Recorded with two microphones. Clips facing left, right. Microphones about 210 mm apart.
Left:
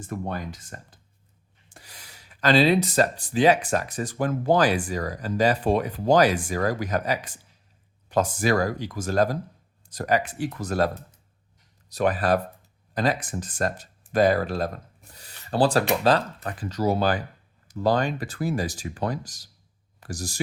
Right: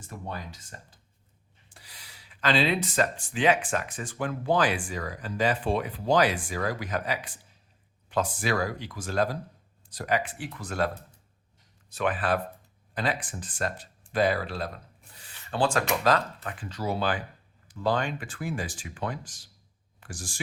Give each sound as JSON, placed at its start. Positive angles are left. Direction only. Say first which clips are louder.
{"t": 0.1, "sound": "speech", "louder": "left 7 dB", "side_deg": 50}